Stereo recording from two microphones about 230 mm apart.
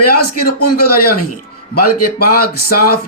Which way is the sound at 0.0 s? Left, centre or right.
Left.